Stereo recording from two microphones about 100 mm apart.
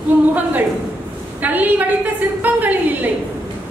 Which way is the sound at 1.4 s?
15° right (ahead or behind).